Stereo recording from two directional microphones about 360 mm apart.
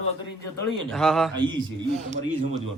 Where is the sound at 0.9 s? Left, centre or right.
Centre.